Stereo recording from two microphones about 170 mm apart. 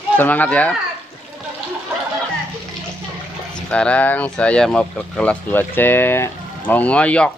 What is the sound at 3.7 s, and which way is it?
Speech, 5° left (ahead or behind).